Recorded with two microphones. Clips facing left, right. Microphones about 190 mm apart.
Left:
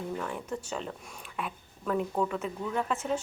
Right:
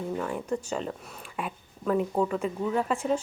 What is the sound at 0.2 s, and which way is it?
A woman's voice, 5° right (ahead or behind).